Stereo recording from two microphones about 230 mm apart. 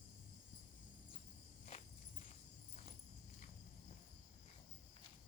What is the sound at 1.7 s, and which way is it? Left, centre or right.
Walk, left.